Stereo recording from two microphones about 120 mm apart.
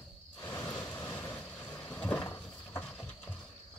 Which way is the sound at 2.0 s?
10° left (ahead or behind).